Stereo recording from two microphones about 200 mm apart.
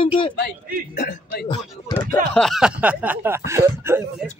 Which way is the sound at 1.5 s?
20° left (ahead or behind).